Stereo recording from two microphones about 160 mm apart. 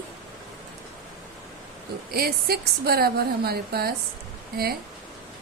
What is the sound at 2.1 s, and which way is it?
A woman's voice, 75° right (ahead or behind).